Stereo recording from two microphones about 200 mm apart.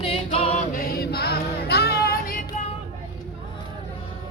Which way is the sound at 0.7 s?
45° left (ahead or behind).